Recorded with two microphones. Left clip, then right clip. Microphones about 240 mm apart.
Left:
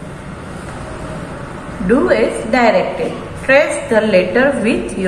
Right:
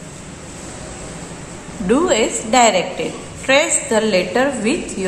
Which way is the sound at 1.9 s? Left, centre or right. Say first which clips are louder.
Left 3 dB; right.